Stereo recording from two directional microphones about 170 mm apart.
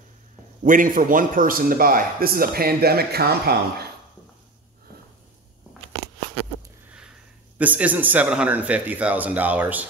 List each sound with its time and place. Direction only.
0.7 s speech: 50° right (ahead or behind); by 3.9 s 70° right (ahead or behind)
7.5 s a man's voice: 10° right (ahead or behind)